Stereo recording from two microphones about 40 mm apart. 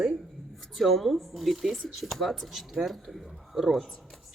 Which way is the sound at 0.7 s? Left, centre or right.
Centre.